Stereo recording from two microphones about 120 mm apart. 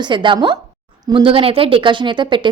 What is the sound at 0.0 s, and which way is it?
A woman's voice, 40° right (ahead or behind).